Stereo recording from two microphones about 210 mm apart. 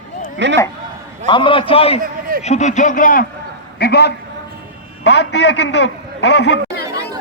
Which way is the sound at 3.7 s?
50° left (ahead or behind).